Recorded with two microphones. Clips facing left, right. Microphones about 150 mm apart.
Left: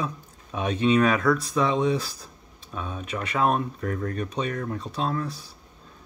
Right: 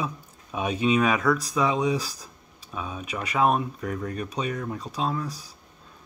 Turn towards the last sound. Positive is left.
turn(degrees=-5)  # may be behind; listen again after turning